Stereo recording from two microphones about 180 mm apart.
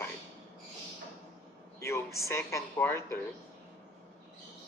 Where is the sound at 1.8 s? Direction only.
15° left (ahead or behind).